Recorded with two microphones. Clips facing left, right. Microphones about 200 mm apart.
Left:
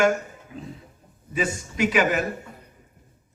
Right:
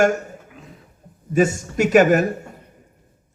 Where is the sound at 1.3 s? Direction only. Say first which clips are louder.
Right 9 dB; 45° right (ahead or behind).